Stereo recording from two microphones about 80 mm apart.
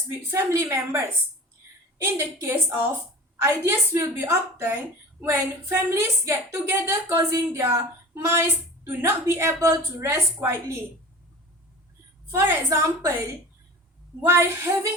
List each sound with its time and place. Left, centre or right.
0.3 s a woman's voice: right
12.3 s a woman's voice: right